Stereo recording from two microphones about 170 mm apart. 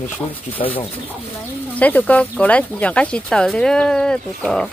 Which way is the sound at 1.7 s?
10° left (ahead or behind).